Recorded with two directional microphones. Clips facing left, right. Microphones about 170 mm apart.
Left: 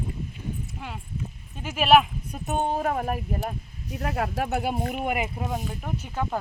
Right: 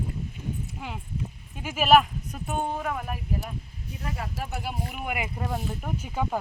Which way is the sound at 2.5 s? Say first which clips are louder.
Left 4 dB; 25° left (ahead or behind).